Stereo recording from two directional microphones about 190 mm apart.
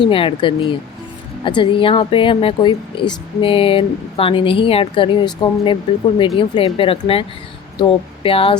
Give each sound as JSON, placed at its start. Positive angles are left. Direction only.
{"t": 0.0, "sound": "speech", "side_deg": 25}